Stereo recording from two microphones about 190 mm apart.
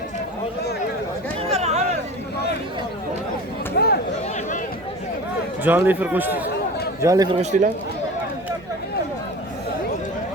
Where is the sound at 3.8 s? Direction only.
55° left (ahead or behind).